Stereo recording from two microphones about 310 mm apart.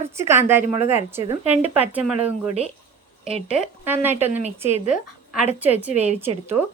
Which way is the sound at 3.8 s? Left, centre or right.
Centre.